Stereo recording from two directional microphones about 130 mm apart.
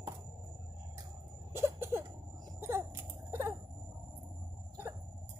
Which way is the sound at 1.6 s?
20° right (ahead or behind).